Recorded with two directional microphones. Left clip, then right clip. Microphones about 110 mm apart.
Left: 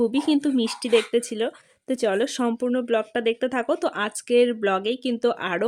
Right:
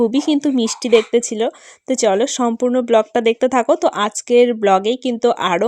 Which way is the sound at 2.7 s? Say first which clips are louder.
Right 9 dB; 40° right (ahead or behind).